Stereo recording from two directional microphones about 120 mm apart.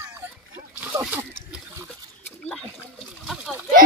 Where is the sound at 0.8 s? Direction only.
15° right (ahead or behind).